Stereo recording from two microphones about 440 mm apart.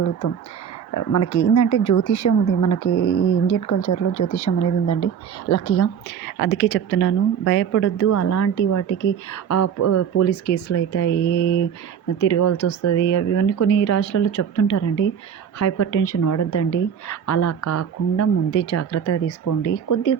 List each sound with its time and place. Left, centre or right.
0.9 s a woman's voice: left
3.0 s speech: left
3.5 s a woman's voice: left
5.5 s a woman's voice: left